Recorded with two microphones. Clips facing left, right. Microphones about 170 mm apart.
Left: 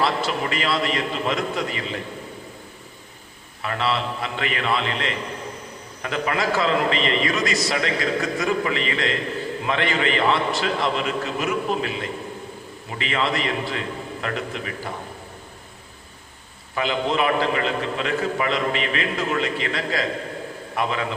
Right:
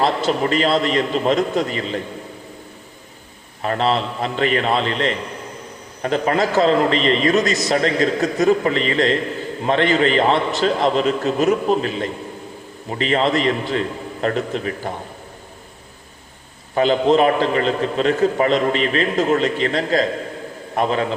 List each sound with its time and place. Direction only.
0.0 s a man's voice: 35° right (ahead or behind)
3.6 s a man's voice: 40° right (ahead or behind)
16.7 s a man's voice: 35° right (ahead or behind)